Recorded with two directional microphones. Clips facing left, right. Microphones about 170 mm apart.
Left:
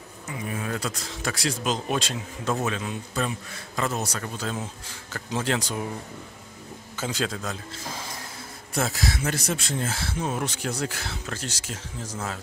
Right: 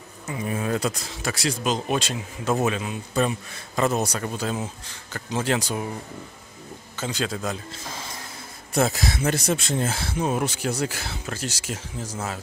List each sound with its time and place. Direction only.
0.5 s speech: 25° right (ahead or behind)
1.2 s speech: centre (ahead or behind)
7.0 s speech: 5° left (ahead or behind)
8.7 s speech: 20° right (ahead or behind)